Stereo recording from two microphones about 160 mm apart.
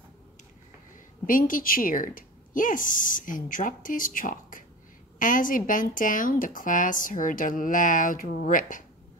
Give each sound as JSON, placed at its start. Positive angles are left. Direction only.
{"t": 1.2, "sound": "speech", "side_deg": 60}